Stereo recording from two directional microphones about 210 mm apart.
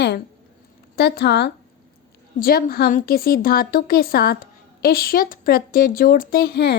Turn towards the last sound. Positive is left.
turn(degrees=50)  # may be behind; listen again after turning